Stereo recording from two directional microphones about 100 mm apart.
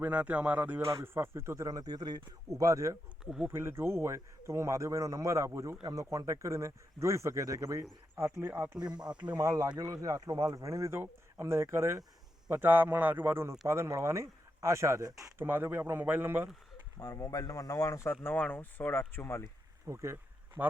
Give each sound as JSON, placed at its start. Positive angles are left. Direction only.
{"t": 0.0, "sound": "music", "side_deg": -15}
{"t": 0.9, "sound": "speech", "side_deg": -25}
{"t": 3.2, "sound": "speech", "side_deg": -5}
{"t": 3.5, "sound": "a man's voice", "side_deg": -25}
{"t": 8.7, "sound": "music", "side_deg": -10}
{"t": 9.4, "sound": "a man's voice", "side_deg": -30}
{"t": 15.4, "sound": "a man's voice", "side_deg": -20}
{"t": 17.0, "sound": "speech", "side_deg": 35}
{"t": 18.1, "sound": "speech", "side_deg": 20}
{"t": 19.9, "sound": "a man's voice", "side_deg": -30}